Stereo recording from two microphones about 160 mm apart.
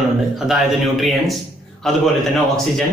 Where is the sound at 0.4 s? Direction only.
Centre (ahead or behind).